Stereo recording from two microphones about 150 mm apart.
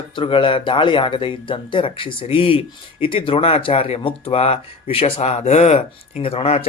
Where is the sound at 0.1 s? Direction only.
35° left (ahead or behind).